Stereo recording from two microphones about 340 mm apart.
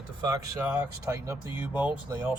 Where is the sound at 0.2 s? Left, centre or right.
Centre.